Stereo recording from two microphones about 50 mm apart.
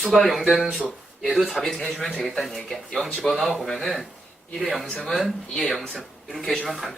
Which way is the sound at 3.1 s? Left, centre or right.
Centre.